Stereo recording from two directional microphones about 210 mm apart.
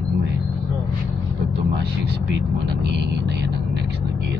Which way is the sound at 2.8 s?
55° right (ahead or behind).